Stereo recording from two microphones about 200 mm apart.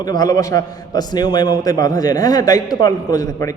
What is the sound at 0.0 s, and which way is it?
A man's voice, 20° left (ahead or behind).